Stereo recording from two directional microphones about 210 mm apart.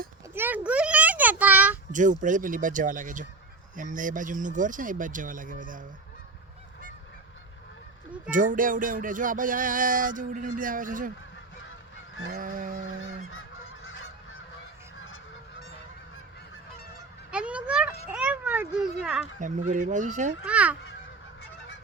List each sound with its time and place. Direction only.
0.3 s a sound: 10° right (ahead or behind)
1.9 s music: 35° right (ahead or behind)
8.3 s music: 40° right (ahead or behind)
12.3 s music: 40° right (ahead or behind)
17.3 s fowl: 5° right (ahead or behind)
18.1 s speech: 5° right (ahead or behind)
19.4 s music: 35° right (ahead or behind)
20.4 s fowl: 5° right (ahead or behind)